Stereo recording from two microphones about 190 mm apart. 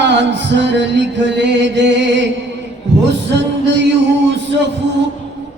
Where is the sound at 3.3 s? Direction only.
65° right (ahead or behind).